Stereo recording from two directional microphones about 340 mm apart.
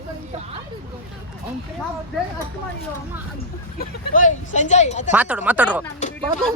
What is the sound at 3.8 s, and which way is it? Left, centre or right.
Speech, left.